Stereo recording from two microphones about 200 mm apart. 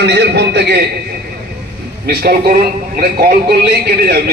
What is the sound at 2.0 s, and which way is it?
Speech, 50° right (ahead or behind).